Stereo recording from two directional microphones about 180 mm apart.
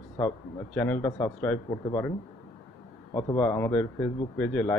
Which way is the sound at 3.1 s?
20° left (ahead or behind).